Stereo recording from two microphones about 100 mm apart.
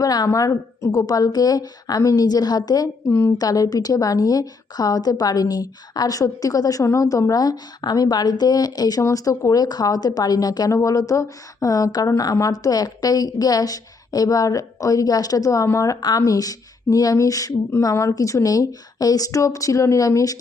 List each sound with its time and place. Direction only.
0.0 s speech: 40° left (ahead or behind)
3.1 s a woman's voice: 25° left (ahead or behind)
3.3 s speech: 40° left (ahead or behind)